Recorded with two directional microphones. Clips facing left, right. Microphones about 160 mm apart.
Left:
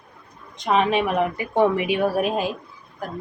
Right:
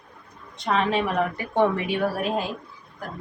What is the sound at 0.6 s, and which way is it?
Speech, 15° left (ahead or behind).